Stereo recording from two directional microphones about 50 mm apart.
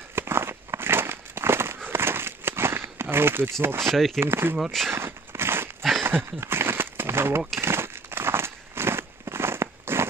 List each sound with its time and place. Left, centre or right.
0.1 s crumpling: right
1.9 s a sound: right
3.6 s speech: right
3.9 s speech: centre
4.2 s speech: right
4.9 s a sound: right